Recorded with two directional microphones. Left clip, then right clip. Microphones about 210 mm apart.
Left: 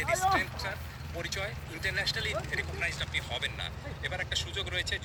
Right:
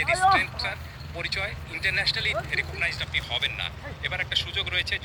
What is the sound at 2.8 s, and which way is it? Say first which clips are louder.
Speech: right 6 dB; 20° left (ahead or behind).